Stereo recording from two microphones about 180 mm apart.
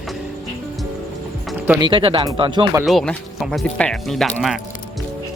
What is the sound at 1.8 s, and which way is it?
Speech, 25° right (ahead or behind).